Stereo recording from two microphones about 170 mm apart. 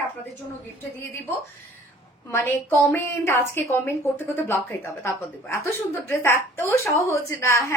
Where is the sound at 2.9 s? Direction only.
15° left (ahead or behind).